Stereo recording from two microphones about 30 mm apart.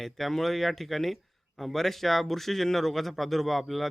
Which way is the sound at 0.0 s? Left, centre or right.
Centre.